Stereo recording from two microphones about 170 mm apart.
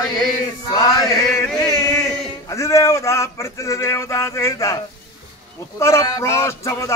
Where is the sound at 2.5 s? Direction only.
20° left (ahead or behind).